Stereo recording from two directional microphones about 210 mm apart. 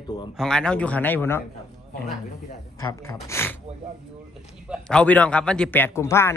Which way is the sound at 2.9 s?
15° left (ahead or behind).